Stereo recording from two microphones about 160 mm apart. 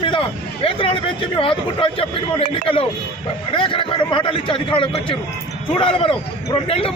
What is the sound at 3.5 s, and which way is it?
Speech, 35° left (ahead or behind).